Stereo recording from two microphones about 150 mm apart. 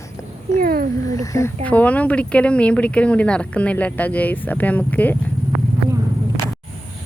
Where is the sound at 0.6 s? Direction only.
75° right (ahead or behind).